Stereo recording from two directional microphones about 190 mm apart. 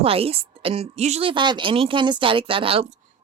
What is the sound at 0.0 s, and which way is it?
A woman's voice, 30° right (ahead or behind).